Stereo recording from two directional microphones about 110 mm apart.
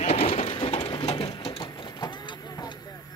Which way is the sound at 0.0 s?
65° left (ahead or behind).